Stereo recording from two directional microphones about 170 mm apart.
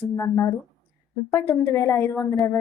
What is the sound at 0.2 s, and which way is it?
A woman's voice, 15° left (ahead or behind).